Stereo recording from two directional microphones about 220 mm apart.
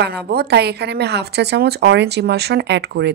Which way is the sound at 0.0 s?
45° right (ahead or behind).